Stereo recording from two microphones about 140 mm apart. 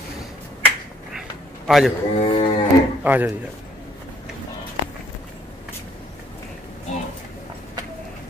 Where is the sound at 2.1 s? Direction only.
45° left (ahead or behind).